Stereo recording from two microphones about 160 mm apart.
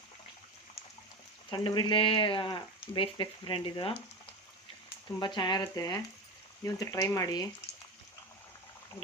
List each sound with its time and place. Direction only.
1.5 s speech: 30° left (ahead or behind)